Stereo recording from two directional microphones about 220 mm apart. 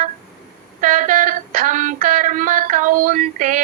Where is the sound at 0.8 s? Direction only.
35° right (ahead or behind).